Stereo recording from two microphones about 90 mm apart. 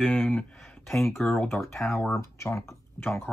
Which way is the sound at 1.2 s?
20° left (ahead or behind).